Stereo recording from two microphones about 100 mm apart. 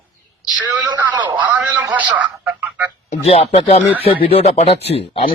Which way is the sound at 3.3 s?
85° left.